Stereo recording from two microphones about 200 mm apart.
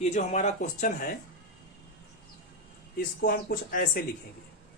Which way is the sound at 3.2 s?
45° left (ahead or behind).